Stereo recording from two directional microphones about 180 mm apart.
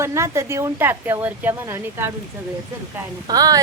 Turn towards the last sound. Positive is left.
turn(degrees=-20)  # may be behind; listen again after turning